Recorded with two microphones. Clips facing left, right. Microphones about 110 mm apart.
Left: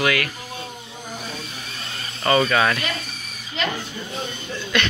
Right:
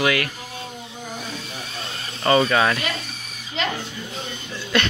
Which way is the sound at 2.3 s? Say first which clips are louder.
Right 1 dB; 25° right (ahead or behind).